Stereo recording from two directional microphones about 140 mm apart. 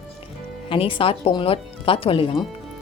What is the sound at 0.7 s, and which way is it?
Speech, 40° left (ahead or behind).